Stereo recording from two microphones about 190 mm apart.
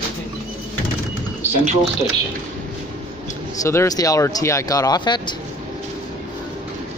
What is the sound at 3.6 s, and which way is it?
Speech, 15° left (ahead or behind).